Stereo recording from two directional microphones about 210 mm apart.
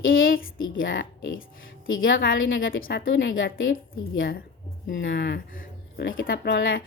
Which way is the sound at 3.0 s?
65° left (ahead or behind).